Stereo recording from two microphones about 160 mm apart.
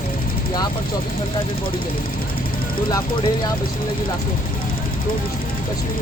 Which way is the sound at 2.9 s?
25° left (ahead or behind).